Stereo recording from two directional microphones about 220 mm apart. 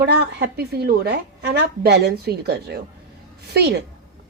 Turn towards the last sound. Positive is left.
turn(degrees=-50)  # may be behind; listen again after turning